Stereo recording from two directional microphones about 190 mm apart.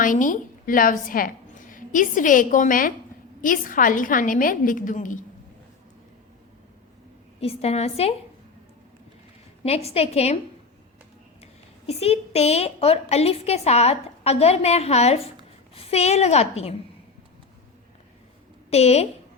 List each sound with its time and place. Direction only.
0.0 s a woman's voice: 45° left (ahead or behind)
7.3 s a woman's voice: 35° left (ahead or behind)
9.6 s a woman's voice: 30° left (ahead or behind)
11.9 s a woman's voice: 30° left (ahead or behind)
18.7 s a woman's voice: 35° left (ahead or behind)